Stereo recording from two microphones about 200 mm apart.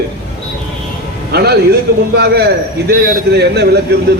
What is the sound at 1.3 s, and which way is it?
A man's voice, 55° right (ahead or behind).